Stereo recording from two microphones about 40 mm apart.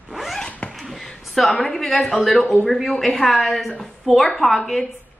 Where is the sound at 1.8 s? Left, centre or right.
Centre.